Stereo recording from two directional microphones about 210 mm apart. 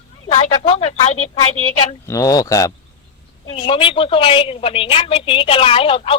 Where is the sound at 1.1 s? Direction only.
85° left.